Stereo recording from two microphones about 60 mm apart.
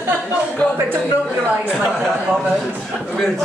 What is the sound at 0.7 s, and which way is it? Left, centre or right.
Speech, right.